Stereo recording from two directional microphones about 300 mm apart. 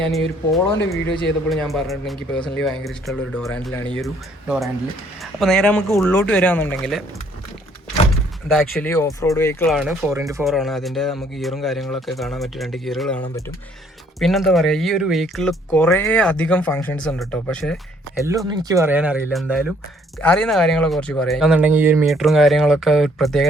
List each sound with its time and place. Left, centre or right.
0.0 s speech: centre
8.7 s speech: centre
18.3 s speech: centre